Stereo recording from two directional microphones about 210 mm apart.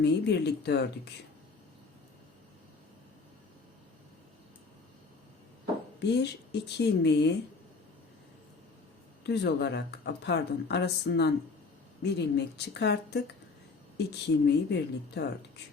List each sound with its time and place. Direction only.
0.0 s speech: 50° left (ahead or behind)
6.0 s speech: 50° left (ahead or behind)
9.2 s speech: 50° left (ahead or behind)